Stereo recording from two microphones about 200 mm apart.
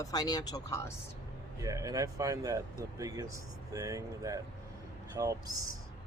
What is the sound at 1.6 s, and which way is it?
Speech, 15° right (ahead or behind).